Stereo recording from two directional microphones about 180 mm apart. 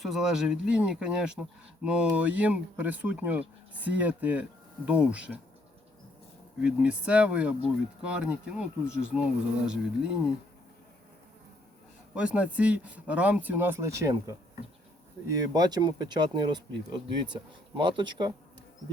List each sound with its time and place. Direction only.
0.0 s speech: centre (ahead or behind)
6.6 s speech: 5° right (ahead or behind)
12.1 s speech: 5° right (ahead or behind)
15.5 s speech: 20° right (ahead or behind)
17.7 s speech: 25° right (ahead or behind)